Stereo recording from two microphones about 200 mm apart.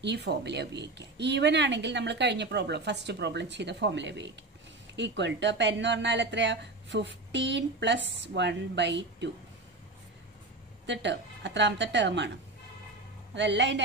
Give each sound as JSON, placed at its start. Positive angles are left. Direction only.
{"t": 0.0, "sound": "speech", "side_deg": -60}
{"t": 10.9, "sound": "speech", "side_deg": -60}
{"t": 13.3, "sound": "speech", "side_deg": -60}